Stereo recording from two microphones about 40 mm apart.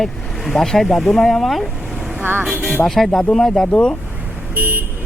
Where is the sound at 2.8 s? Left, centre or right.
Left.